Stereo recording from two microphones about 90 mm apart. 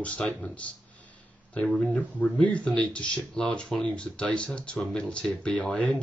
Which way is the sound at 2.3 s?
15° left (ahead or behind).